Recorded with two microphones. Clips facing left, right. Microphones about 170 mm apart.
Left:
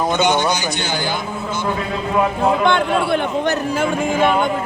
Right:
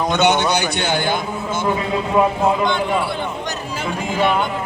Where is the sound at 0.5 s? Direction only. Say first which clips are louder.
Right 2 dB; 60° right (ahead or behind).